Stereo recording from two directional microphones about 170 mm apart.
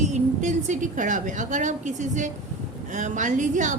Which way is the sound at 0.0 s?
45° right (ahead or behind).